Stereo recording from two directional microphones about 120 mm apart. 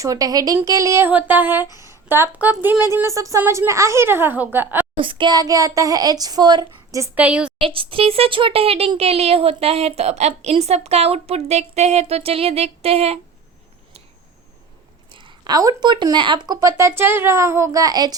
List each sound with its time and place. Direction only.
0.0 s a woman's voice: 30° right (ahead or behind)
4.9 s a child's voice: 45° right (ahead or behind)
7.2 s a woman's voice: 10° right (ahead or behind)
7.6 s a woman's voice: 50° right (ahead or behind)
15.1 s speech: 45° right (ahead or behind)
16.6 s speech: 25° right (ahead or behind)